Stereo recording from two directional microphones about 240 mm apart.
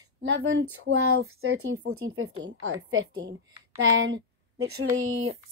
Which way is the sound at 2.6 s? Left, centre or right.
Right.